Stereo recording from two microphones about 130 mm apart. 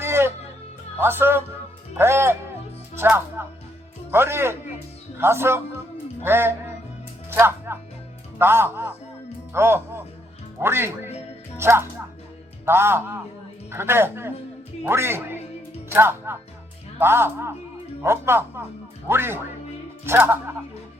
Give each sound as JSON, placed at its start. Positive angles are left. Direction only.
{"t": 0.0, "sound": "music", "side_deg": -20}
{"t": 0.9, "sound": "a woman's voice", "side_deg": -15}
{"t": 7.3, "sound": "music", "side_deg": -20}
{"t": 8.4, "sound": "a woman's voice", "side_deg": -15}